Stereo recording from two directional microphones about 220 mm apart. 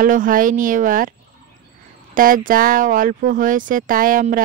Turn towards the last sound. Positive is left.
turn(degrees=-40)  # may be behind; listen again after turning